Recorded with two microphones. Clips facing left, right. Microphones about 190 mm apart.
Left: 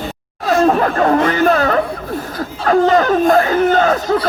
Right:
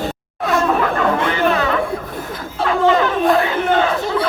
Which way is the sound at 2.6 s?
45° left (ahead or behind).